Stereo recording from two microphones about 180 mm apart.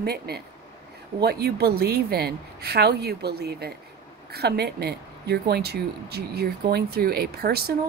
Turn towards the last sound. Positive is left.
turn(degrees=-60)  # may be behind; listen again after turning